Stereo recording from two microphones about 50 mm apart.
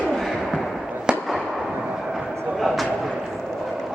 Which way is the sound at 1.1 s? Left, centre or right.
Centre.